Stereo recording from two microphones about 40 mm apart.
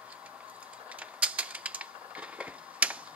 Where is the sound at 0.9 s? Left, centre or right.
Right.